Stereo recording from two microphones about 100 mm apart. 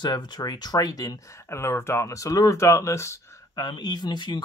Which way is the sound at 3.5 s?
45° left (ahead or behind).